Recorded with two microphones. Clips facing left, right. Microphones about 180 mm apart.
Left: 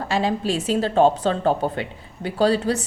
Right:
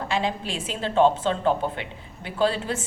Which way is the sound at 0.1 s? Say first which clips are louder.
Left 6 dB; 40° left (ahead or behind).